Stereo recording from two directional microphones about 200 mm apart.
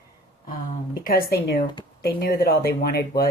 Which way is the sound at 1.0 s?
50° left (ahead or behind).